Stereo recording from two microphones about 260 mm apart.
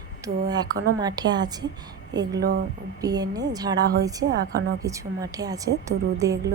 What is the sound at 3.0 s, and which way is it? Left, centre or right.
Speech, centre.